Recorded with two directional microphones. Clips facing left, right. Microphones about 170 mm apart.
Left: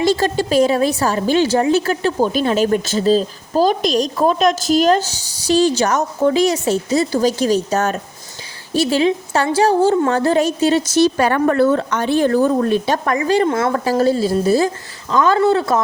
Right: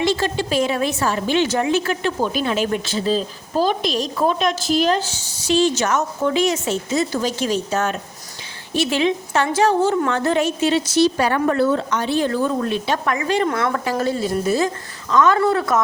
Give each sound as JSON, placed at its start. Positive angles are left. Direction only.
{"t": 0.0, "sound": "a woman's voice", "side_deg": 40}